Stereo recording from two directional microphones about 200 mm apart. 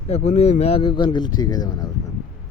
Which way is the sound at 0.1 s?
30° left (ahead or behind).